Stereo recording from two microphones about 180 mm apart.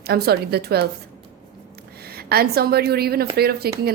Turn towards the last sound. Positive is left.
turn(degrees=-60)  # may be behind; listen again after turning